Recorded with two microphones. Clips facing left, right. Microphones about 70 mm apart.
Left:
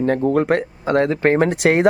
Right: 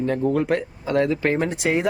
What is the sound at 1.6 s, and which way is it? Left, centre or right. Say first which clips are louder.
Speech: left 6 dB; left.